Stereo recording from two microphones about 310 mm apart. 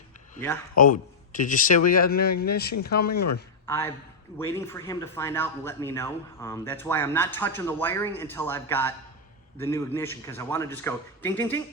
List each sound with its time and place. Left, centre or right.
0.8 s a man's voice: left
3.7 s speech: centre